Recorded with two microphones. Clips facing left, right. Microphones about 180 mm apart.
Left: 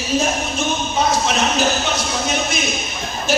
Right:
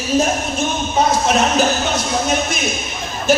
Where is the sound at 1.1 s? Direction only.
50° right (ahead or behind).